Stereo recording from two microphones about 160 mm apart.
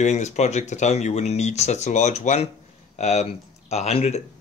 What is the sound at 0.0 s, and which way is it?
Speech, 45° left (ahead or behind).